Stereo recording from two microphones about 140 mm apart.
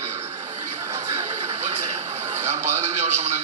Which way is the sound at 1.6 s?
55° right (ahead or behind).